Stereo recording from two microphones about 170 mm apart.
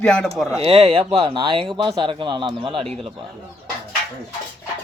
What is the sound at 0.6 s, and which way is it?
Speech, 35° right (ahead or behind).